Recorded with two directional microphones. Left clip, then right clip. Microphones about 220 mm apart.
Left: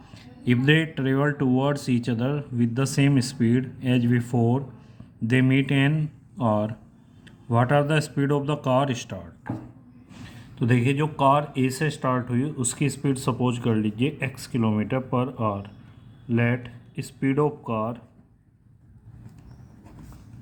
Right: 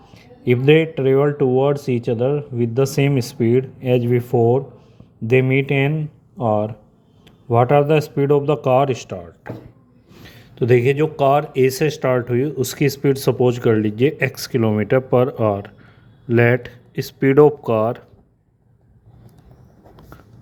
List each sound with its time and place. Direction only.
0.1 s speech: 20° right (ahead or behind); by 18.0 s 40° right (ahead or behind)